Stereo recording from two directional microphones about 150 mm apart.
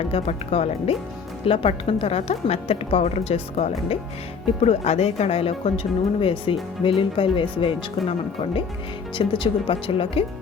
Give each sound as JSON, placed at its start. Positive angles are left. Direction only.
{"t": 0.0, "sound": "speech", "side_deg": 45}
{"t": 9.1, "sound": "speech", "side_deg": 35}